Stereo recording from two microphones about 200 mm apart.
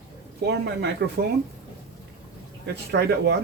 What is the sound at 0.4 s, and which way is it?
Speech, 60° right (ahead or behind).